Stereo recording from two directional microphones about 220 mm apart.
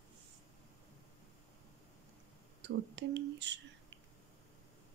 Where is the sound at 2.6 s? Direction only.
50° right (ahead or behind).